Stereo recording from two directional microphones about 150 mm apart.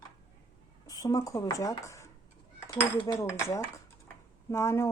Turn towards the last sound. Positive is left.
turn(degrees=15)  # may be behind; listen again after turning